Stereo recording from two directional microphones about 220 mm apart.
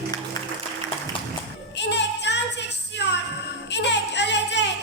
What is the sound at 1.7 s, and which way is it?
Child singing, 50° left (ahead or behind).